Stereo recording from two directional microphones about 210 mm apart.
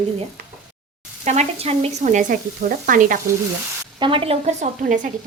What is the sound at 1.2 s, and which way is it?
Speech, 35° right (ahead or behind).